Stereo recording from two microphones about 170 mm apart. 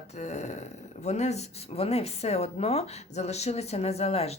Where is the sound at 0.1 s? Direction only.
40° left (ahead or behind).